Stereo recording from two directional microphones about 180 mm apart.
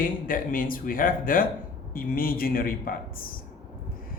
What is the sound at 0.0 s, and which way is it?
Speech, 50° left (ahead or behind).